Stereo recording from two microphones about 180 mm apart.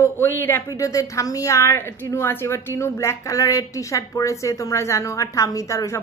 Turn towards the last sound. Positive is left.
turn(degrees=15)  # may be behind; listen again after turning